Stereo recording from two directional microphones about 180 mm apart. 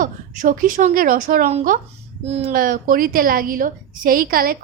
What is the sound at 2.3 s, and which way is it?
Speech, 35° right (ahead or behind).